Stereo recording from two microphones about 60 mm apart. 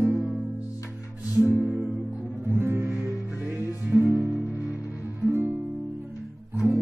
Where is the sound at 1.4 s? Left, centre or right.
Right.